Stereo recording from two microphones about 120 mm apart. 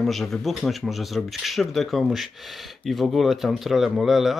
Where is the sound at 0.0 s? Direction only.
Centre (ahead or behind).